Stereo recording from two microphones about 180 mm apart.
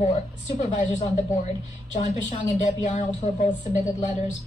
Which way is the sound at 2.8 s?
40° left (ahead or behind).